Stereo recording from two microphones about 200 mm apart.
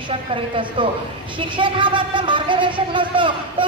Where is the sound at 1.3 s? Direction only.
25° right (ahead or behind).